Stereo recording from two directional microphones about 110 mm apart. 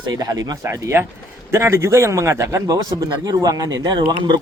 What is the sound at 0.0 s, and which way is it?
A man's voice, 35° right (ahead or behind).